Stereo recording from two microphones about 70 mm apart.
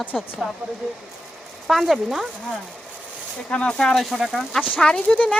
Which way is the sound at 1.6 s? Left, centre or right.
Centre.